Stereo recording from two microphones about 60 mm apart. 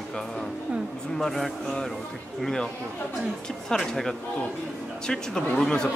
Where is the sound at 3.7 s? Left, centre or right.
Centre.